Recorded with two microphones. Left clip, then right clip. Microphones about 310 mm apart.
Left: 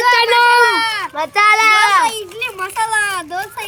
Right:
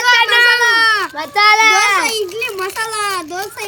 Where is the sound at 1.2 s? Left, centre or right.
Centre.